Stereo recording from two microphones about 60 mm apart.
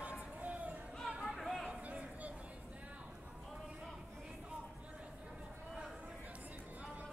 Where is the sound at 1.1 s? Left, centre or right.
Centre.